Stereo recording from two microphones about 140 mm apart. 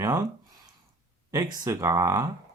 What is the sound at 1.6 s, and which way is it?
Speech, 25° right (ahead or behind).